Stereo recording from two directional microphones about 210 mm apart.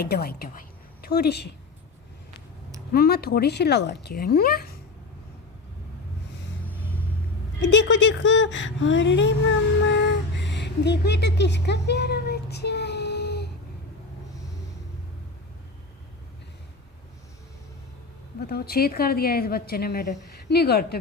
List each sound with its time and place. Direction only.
0.0 s a woman's voice: 50° left (ahead or behind)
2.9 s a woman's voice: 50° left (ahead or behind)
7.6 s a woman's voice: 60° left (ahead or behind)
18.3 s a woman's voice: 50° left (ahead or behind)